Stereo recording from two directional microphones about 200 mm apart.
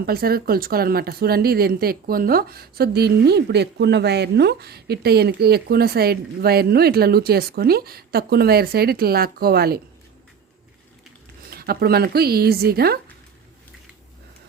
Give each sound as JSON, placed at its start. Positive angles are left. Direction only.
{"t": 0.0, "sound": "speech", "side_deg": -50}
{"t": 11.5, "sound": "speech", "side_deg": -50}